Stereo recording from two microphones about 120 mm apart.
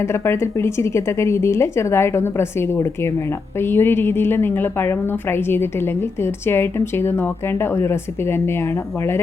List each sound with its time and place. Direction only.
0.0 s a woman's voice: 20° left (ahead or behind)